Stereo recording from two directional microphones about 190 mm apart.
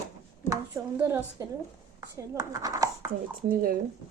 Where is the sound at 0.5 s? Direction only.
15° right (ahead or behind).